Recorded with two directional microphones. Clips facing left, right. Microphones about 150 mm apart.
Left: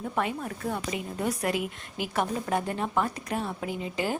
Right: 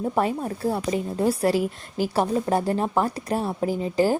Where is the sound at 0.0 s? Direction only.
35° right (ahead or behind).